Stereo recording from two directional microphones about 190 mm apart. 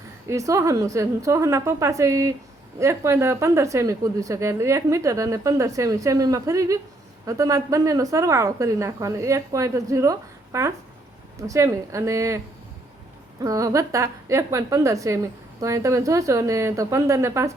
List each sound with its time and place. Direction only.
0.3 s a woman's voice: 15° right (ahead or behind)
13.4 s a woman's voice: 15° right (ahead or behind)